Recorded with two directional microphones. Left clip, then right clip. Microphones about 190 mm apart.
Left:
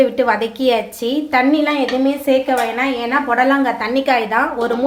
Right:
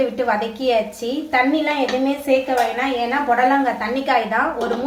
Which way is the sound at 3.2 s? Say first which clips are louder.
Left 1 dB; 40° left (ahead or behind).